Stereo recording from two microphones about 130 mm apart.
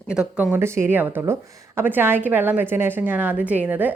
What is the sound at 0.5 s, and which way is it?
A woman's voice, 20° right (ahead or behind).